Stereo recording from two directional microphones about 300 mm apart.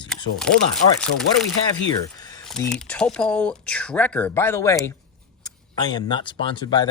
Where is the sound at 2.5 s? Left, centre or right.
Centre.